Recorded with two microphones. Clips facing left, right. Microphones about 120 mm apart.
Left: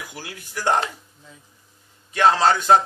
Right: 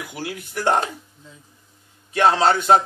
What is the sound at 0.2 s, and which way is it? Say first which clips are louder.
Speech: right 4 dB; 60° right (ahead or behind).